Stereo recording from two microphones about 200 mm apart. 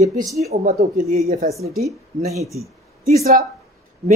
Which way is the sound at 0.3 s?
35° right (ahead or behind).